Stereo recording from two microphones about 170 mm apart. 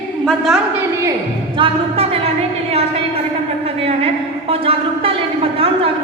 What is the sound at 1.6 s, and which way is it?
Speech, 35° right (ahead or behind).